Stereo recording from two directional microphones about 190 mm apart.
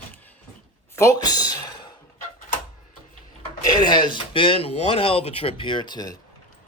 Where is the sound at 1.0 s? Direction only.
20° left (ahead or behind).